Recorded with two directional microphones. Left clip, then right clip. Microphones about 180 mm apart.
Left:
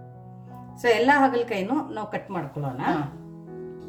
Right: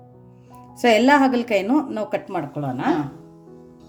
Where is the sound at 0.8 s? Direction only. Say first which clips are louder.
Right 4 dB; 50° right (ahead or behind).